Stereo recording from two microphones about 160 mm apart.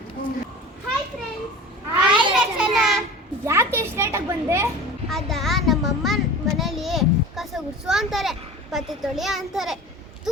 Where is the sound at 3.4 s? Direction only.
15° right (ahead or behind).